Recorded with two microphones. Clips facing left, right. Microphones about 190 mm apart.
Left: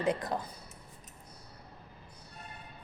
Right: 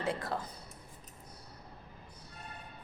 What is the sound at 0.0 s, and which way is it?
Speech, 20° left (ahead or behind).